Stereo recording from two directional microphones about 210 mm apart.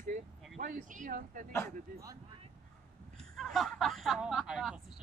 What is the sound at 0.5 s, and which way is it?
Speech, 35° right (ahead or behind).